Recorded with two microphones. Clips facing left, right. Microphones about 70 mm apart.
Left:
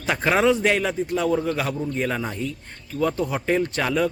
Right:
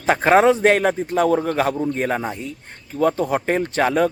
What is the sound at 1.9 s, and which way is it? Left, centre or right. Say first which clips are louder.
Speech: right 3 dB; right.